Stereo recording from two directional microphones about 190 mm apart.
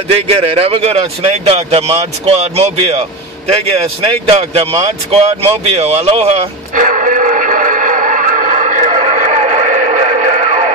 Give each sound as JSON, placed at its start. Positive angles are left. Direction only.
{"t": 0.1, "sound": "speech", "side_deg": -30}
{"t": 4.0, "sound": "speech", "side_deg": -30}
{"t": 6.7, "sound": "radio", "side_deg": -45}